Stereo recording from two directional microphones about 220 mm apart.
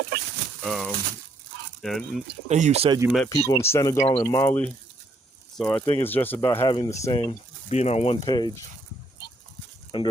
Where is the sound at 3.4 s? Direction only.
10° left (ahead or behind).